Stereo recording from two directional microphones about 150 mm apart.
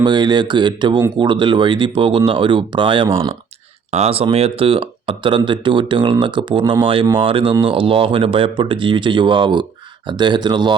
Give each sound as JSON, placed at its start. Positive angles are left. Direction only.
{"t": 0.0, "sound": "speech", "side_deg": -30}